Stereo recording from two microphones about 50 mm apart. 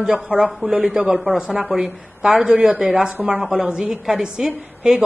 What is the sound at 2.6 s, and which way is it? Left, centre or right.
Speech, centre.